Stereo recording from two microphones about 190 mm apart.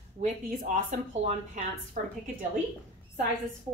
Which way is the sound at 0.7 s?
40° right (ahead or behind).